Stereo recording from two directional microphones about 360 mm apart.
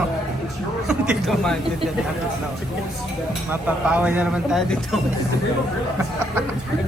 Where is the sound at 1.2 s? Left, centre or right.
Centre.